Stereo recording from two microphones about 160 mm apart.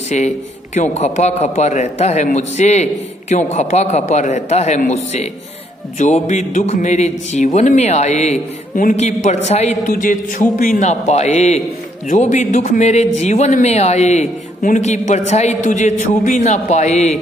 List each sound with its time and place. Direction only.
0.1 s a man's voice: 50° left (ahead or behind)